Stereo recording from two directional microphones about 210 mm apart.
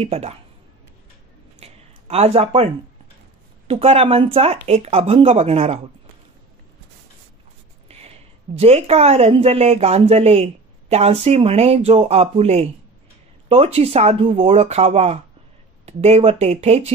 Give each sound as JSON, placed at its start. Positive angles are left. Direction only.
{"t": 0.0, "sound": "a woman's voice", "side_deg": -30}
{"t": 1.6, "sound": "a sound", "side_deg": -30}
{"t": 3.6, "sound": "a woman's voice", "side_deg": -25}
{"t": 8.5, "sound": "a woman's voice", "side_deg": -30}